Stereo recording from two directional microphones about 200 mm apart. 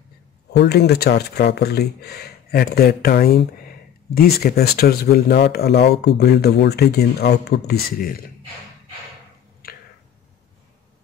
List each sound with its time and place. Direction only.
0.5 s speech: 55° left (ahead or behind)